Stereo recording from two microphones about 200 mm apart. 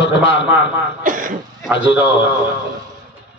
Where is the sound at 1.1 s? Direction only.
40° right (ahead or behind).